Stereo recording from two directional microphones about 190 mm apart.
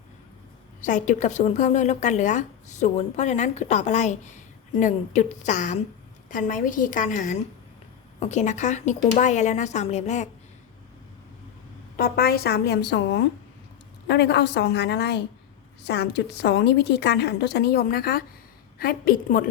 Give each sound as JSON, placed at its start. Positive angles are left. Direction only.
{"t": 0.8, "sound": "a woman's voice", "side_deg": 40}
{"t": 11.9, "sound": "a woman's voice", "side_deg": 50}